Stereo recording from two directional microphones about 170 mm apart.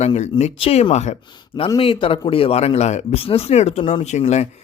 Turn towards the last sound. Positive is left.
turn(degrees=40)  # may be behind; listen again after turning